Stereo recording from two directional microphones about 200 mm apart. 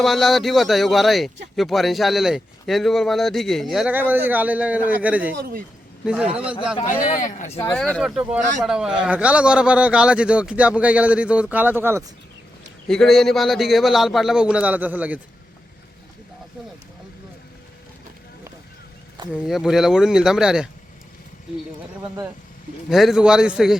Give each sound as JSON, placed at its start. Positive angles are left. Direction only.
{"t": 0.0, "sound": "a man's voice", "side_deg": 0}
{"t": 5.3, "sound": "speech", "side_deg": -50}
{"t": 6.1, "sound": "a man's voice", "side_deg": -5}
{"t": 7.0, "sound": "speech", "side_deg": 40}
{"t": 7.8, "sound": "a man's voice", "side_deg": 5}
{"t": 12.9, "sound": "a man's voice", "side_deg": 0}
{"t": 19.3, "sound": "a man's voice", "side_deg": 0}
{"t": 22.9, "sound": "a man's voice", "side_deg": 0}